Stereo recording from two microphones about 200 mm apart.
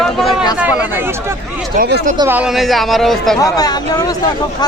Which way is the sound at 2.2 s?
10° right (ahead or behind).